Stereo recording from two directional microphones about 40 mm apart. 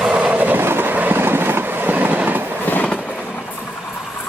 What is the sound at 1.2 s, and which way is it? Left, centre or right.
Train, right.